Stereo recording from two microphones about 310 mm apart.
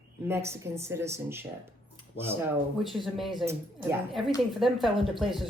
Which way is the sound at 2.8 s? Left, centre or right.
Centre.